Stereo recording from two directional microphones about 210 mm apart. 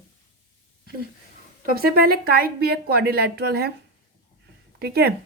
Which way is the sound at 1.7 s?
45° right (ahead or behind).